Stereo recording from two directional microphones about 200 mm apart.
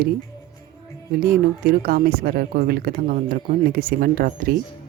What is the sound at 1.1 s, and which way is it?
Speech, 45° right (ahead or behind).